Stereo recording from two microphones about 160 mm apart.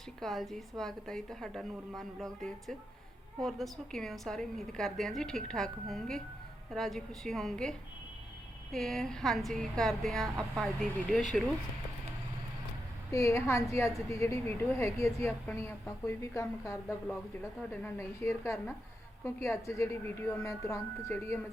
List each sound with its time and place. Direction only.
0.2 s a woman's voice: centre (ahead or behind)
13.1 s a woman's voice: 20° left (ahead or behind)